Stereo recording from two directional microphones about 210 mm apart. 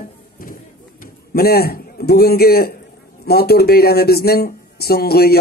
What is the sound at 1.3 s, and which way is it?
A man's voice, 45° left (ahead or behind).